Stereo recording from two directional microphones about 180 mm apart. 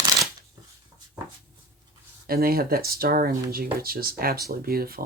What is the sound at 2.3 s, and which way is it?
Speech, 55° right (ahead or behind).